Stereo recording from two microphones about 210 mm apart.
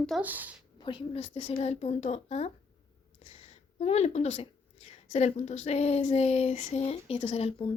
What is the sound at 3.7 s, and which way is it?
A woman's voice, 30° left (ahead or behind).